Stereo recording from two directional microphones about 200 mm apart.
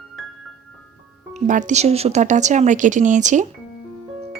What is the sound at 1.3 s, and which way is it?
Speech, 40° right (ahead or behind).